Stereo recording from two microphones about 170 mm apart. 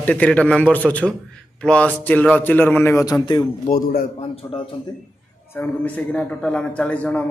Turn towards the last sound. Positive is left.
turn(degrees=5)  # may be behind; listen again after turning